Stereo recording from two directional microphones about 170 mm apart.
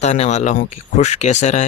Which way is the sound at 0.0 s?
40° left (ahead or behind).